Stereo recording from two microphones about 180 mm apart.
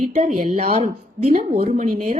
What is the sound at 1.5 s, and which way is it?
Speech, 45° right (ahead or behind).